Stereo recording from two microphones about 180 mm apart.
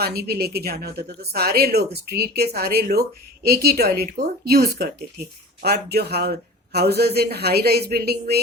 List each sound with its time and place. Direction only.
0.0 s a woman's voice: 60° right (ahead or behind)